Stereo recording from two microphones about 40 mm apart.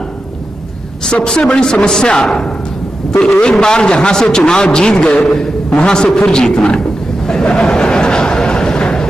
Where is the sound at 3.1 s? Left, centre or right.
Centre.